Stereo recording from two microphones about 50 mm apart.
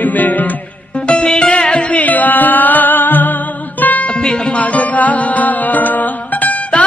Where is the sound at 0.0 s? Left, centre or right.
Left.